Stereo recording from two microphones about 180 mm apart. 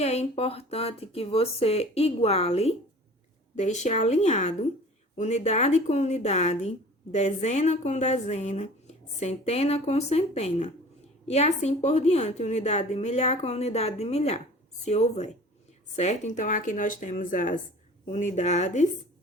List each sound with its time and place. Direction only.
0.0 s speech: 35° left (ahead or behind)